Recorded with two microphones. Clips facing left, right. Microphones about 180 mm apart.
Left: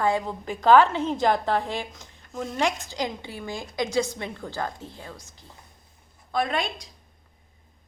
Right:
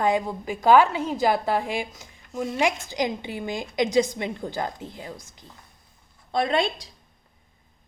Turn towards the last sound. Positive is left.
turn(degrees=-30)  # may be behind; listen again after turning